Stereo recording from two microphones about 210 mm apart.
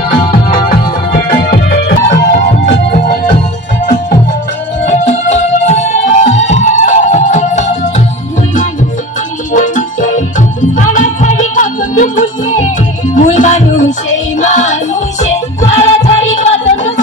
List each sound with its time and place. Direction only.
0.1 s music: 40° left (ahead or behind)
4.8 s music: 30° left (ahead or behind)
9.5 s music: 40° left (ahead or behind)